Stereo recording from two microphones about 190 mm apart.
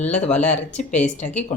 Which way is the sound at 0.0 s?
35° left (ahead or behind).